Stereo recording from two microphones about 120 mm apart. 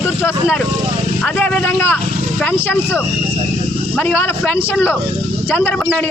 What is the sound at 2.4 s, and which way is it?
Speech, 15° left (ahead or behind).